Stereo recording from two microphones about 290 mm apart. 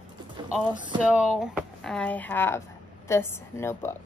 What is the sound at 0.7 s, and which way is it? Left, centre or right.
Speech, centre.